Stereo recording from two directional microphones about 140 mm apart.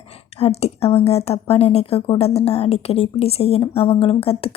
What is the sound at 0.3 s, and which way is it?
Speech, 45° left (ahead or behind).